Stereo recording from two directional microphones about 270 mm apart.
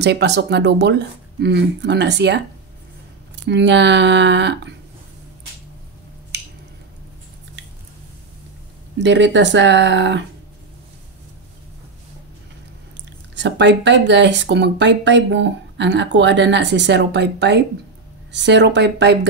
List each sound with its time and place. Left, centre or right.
0.0 s speech: right
3.4 s speech: right
6.3 s a sound: right
8.9 s speech: right
13.3 s speech: right